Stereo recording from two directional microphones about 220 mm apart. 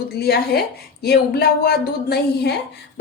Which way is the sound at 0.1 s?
45° left (ahead or behind).